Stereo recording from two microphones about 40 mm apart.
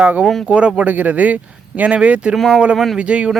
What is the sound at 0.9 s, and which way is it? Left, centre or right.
Speech, right.